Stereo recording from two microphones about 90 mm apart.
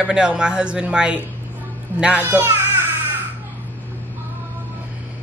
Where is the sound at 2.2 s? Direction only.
25° right (ahead or behind).